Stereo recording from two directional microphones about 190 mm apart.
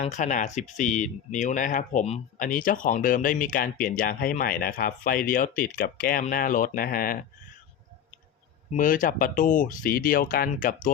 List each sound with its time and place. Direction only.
0.0 s speech: 40° left (ahead or behind)
8.7 s speech: 45° left (ahead or behind)